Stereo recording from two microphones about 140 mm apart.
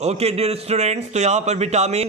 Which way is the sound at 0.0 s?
50° right (ahead or behind).